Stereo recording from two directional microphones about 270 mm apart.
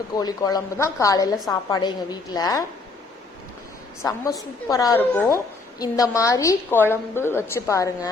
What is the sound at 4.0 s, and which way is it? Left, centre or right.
A woman's voice, centre.